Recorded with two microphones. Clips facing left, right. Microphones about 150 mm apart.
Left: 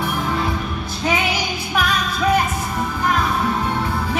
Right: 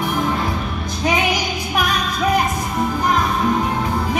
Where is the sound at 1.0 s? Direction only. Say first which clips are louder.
Right 2 dB; 15° right (ahead or behind).